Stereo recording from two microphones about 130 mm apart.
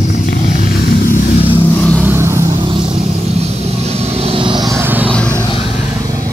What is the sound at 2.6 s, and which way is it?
Vehicle, 40° right (ahead or behind).